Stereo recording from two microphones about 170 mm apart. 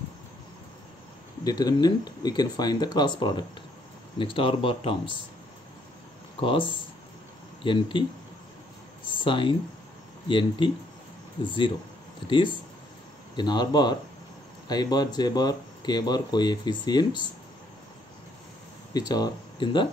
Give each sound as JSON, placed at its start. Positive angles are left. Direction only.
{"t": 1.4, "sound": "speech", "side_deg": 20}
{"t": 6.4, "sound": "speech", "side_deg": 30}
{"t": 9.0, "sound": "a sound", "side_deg": 30}
{"t": 10.2, "sound": "speech", "side_deg": 30}
{"t": 13.4, "sound": "speech", "side_deg": 25}
{"t": 18.9, "sound": "speech", "side_deg": 25}